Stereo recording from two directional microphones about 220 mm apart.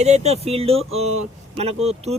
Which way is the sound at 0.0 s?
30° right (ahead or behind).